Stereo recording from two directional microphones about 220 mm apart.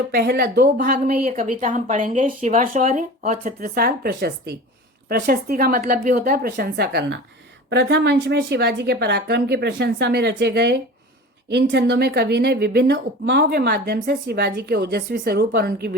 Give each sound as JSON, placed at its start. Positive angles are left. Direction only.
{"t": 0.1, "sound": "speech", "side_deg": -45}